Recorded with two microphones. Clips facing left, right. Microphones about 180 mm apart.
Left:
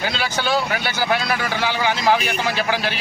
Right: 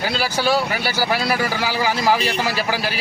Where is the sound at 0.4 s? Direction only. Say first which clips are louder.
Right 1 dB; 5° right (ahead or behind).